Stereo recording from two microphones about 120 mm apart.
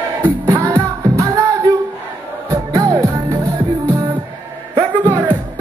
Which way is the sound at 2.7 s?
30° right (ahead or behind).